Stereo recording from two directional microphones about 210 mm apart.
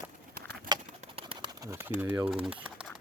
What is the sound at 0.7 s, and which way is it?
Bird, 20° right (ahead or behind).